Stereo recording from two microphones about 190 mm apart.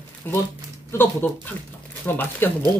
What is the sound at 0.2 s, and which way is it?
Speech, 10° left (ahead or behind).